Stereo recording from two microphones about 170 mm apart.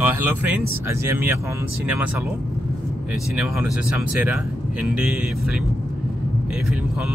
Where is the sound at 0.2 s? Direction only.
10° right (ahead or behind).